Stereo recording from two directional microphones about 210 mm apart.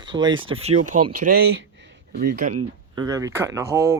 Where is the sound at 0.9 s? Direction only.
40° right (ahead or behind).